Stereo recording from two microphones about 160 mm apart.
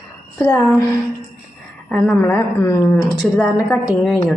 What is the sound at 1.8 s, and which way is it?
A woman's voice, 5° left (ahead or behind).